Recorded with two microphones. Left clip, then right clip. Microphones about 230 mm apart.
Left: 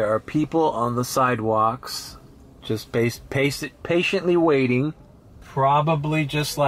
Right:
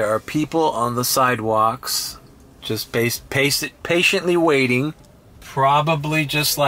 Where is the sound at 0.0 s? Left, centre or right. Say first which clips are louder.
Right 2 dB; centre.